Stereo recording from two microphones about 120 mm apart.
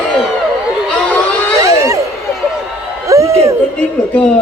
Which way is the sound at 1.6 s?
25° right (ahead or behind).